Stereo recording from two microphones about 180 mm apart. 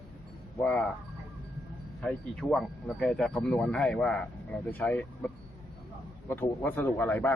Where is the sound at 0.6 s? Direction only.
5° left (ahead or behind).